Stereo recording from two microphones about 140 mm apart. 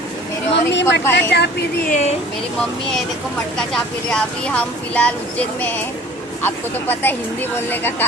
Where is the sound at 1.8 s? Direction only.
60° left (ahead or behind).